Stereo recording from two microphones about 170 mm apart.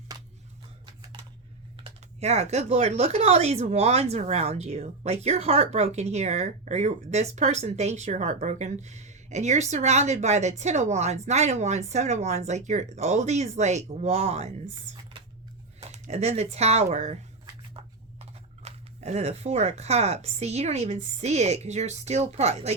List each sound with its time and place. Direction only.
1.7 s speech: 35° right (ahead or behind)
15.1 s a sound: 30° right (ahead or behind)
15.8 s speech: 40° right (ahead or behind)
18.6 s speech: 40° right (ahead or behind)